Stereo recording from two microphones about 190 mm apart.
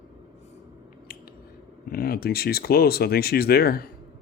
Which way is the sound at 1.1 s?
50° left (ahead or behind).